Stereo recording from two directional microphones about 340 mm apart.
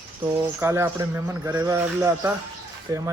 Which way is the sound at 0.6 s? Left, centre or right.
Centre.